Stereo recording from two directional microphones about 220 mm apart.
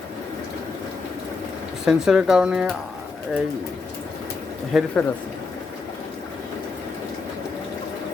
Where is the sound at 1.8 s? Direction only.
Centre (ahead or behind).